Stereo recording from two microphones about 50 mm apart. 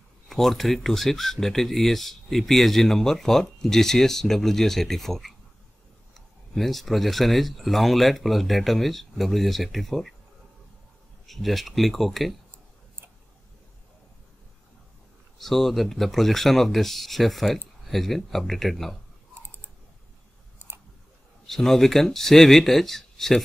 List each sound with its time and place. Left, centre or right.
0.3 s speech: centre
11.2 s speech: centre
15.3 s speech: centre
20.5 s a sound: right
21.5 s speech: centre